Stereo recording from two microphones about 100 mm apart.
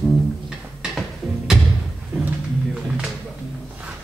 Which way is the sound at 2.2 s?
5° right (ahead or behind).